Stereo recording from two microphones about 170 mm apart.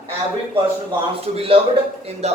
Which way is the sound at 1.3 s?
35° right (ahead or behind).